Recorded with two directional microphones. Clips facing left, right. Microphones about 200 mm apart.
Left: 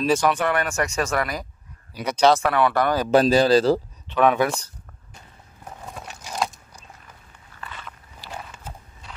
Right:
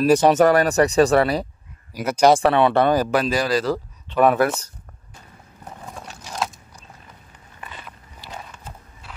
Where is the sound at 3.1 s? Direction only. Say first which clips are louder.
Left 4 dB; 30° left (ahead or behind).